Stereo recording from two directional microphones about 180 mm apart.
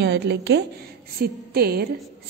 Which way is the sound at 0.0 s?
70° right (ahead or behind).